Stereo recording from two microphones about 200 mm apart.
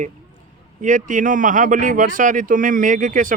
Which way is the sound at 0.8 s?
40° right (ahead or behind).